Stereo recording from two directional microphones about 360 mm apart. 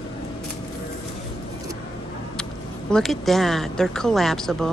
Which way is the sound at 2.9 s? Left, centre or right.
Centre.